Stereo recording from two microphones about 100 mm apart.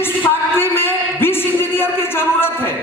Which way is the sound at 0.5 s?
20° left (ahead or behind).